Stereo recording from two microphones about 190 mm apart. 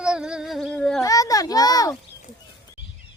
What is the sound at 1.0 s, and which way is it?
Speech, 20° left (ahead or behind).